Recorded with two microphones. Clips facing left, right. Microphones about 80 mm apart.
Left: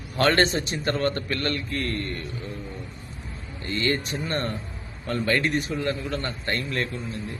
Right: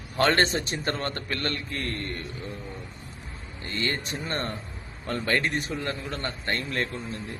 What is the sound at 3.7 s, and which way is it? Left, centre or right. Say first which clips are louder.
A man's voice: left 4 dB; right.